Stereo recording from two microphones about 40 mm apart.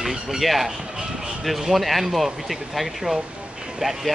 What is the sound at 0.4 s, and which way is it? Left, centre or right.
Speech, centre.